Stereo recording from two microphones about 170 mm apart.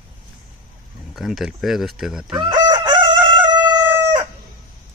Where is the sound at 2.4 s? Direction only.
25° right (ahead or behind).